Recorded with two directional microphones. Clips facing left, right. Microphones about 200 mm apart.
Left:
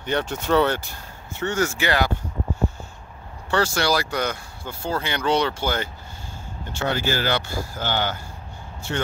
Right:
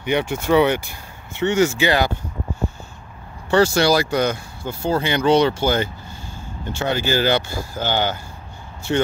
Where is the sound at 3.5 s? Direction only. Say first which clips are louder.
Right 6 dB; 20° right (ahead or behind).